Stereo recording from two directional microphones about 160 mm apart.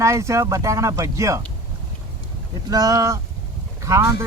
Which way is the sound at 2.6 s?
20° right (ahead or behind).